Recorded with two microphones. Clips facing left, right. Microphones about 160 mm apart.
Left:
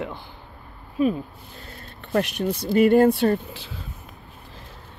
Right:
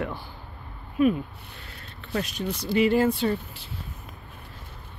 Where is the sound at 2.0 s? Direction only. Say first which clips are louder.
Left 6 dB; 60° left (ahead or behind).